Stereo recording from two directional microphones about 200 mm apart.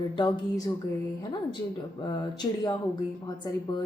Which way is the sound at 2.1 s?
20° left (ahead or behind).